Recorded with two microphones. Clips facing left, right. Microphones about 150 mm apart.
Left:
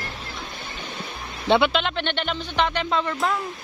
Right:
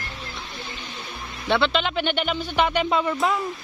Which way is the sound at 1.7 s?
5° right (ahead or behind).